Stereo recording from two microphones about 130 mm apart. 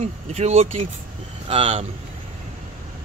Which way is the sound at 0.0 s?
55° right (ahead or behind).